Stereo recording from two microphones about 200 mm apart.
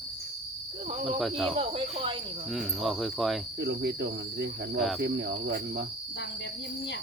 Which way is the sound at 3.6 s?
55° right (ahead or behind).